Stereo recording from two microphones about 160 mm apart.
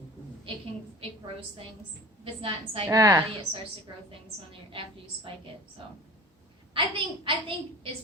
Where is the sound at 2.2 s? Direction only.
35° right (ahead or behind).